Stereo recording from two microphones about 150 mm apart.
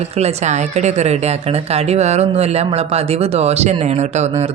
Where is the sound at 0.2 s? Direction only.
50° right (ahead or behind).